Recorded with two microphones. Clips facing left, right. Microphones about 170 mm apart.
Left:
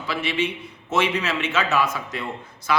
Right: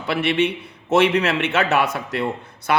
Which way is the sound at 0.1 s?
60° right (ahead or behind).